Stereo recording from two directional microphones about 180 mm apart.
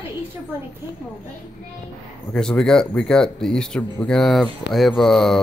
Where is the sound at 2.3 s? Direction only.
5° left (ahead or behind).